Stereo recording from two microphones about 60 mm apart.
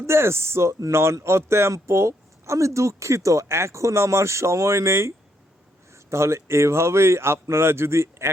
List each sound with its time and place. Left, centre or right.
0.0 s speech: right